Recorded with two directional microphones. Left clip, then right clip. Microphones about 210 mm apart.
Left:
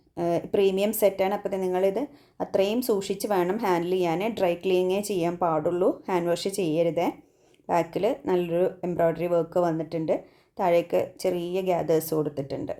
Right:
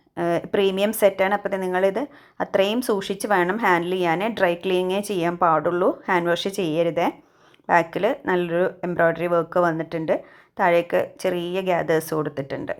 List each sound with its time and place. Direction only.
0.2 s a woman's voice: 5° right (ahead or behind)